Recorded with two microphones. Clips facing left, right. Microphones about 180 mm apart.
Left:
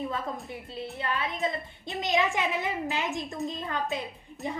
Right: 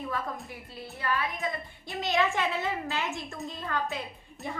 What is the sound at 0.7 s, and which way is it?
A woman's voice, 20° left (ahead or behind).